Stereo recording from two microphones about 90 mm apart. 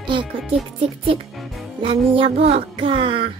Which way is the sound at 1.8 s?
80° right.